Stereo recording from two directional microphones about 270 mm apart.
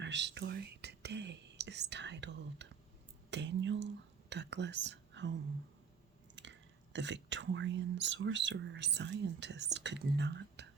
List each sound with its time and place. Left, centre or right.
0.0 s speech: right